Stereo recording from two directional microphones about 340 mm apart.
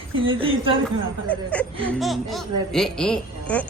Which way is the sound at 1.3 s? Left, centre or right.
Centre.